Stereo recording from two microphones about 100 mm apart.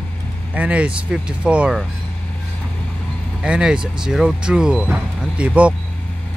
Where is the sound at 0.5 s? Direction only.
15° right (ahead or behind).